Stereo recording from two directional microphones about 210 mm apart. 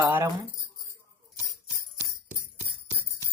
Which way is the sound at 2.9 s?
10° right (ahead or behind).